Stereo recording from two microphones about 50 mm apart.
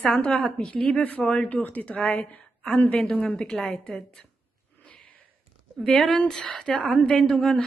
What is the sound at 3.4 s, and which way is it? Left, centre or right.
Speech, centre.